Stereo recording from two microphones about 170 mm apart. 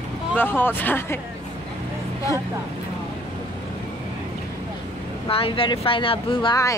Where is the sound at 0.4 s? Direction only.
10° left (ahead or behind).